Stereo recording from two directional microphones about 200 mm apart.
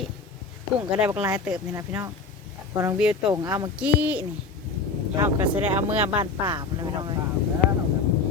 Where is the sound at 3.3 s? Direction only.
20° right (ahead or behind).